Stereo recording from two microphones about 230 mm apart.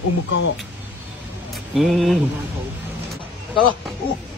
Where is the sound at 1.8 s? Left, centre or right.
Centre.